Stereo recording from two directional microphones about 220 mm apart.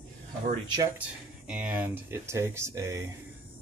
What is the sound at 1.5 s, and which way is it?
Speech, 5° right (ahead or behind).